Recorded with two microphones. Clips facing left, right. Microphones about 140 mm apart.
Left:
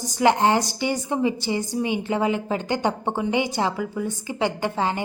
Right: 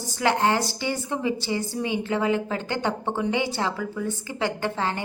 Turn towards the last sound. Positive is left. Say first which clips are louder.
# left 2 dB
turn(degrees=15)  # may be behind; listen again after turning